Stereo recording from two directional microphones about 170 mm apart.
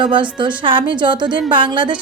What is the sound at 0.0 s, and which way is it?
A woman's voice, 30° right (ahead or behind).